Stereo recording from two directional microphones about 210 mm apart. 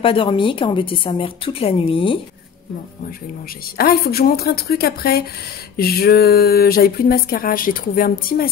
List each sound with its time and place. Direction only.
0.0 s a woman's voice: 25° left (ahead or behind)
3.7 s speech: 45° left (ahead or behind)